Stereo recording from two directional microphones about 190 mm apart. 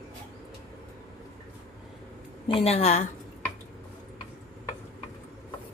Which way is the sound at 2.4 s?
30° left (ahead or behind).